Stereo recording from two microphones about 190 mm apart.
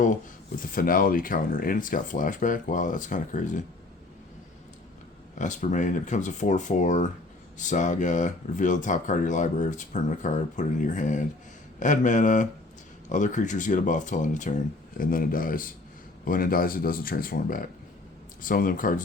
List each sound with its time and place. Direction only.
0.6 s speech: 45° left (ahead or behind)
5.3 s speech: 40° left (ahead or behind)